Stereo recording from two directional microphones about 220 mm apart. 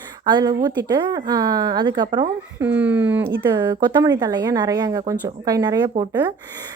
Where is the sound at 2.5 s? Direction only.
5° right (ahead or behind).